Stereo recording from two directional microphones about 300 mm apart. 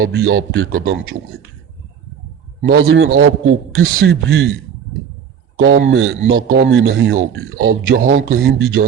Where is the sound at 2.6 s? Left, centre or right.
Right.